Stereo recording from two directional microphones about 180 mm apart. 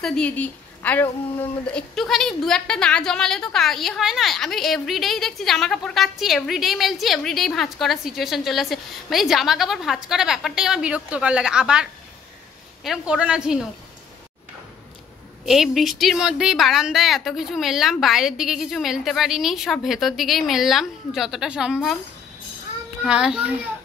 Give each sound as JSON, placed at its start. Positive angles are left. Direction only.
{"t": 0.0, "sound": "a woman's voice", "side_deg": 5}
{"t": 15.4, "sound": "a woman's voice", "side_deg": 0}
{"t": 23.0, "sound": "a woman's voice", "side_deg": -5}